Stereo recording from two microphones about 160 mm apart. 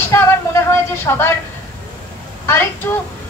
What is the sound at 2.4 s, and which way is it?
Speech, 15° left (ahead or behind).